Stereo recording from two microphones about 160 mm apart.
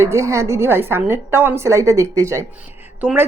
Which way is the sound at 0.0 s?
15° right (ahead or behind).